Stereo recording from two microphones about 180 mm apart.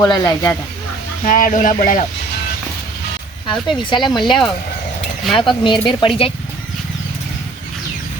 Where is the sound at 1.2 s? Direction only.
50° left (ahead or behind).